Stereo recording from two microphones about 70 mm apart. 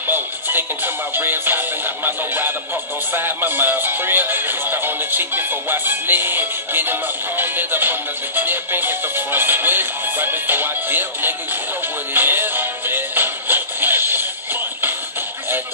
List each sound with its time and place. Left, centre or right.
0.0 s music: right